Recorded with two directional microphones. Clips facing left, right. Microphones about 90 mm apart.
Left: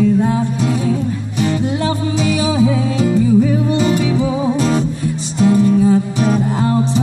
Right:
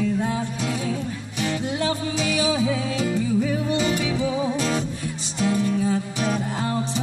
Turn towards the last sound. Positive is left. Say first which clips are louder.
# left 9 dB
turn(degrees=45)  # may be behind; listen again after turning